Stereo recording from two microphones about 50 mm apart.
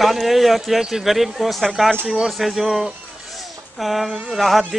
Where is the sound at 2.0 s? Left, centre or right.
Centre.